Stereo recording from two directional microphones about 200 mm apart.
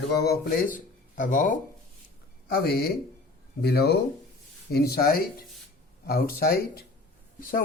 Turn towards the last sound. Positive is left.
turn(degrees=45)  # may be behind; listen again after turning